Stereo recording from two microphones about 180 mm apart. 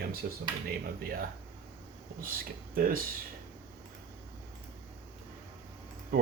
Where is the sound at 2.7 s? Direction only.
50° right (ahead or behind).